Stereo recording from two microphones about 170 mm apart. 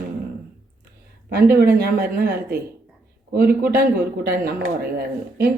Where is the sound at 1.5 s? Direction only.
65° right (ahead or behind).